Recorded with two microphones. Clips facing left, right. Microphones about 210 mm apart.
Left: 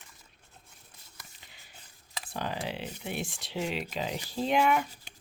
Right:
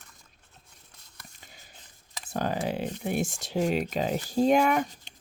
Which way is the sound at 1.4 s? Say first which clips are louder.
Right 4 dB; 45° right (ahead or behind).